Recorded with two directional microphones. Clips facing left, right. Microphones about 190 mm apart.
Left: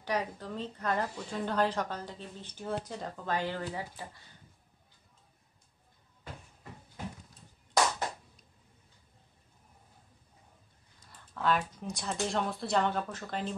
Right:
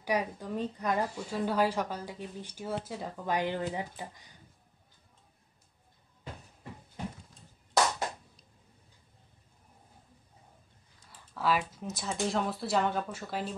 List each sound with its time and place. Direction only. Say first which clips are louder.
0.0 s speech: right 2 dB; 10° right (ahead or behind)
3.3 s speech: right 4 dB; 20° right (ahead or behind)
11.1 s speech: even; 5° right (ahead or behind)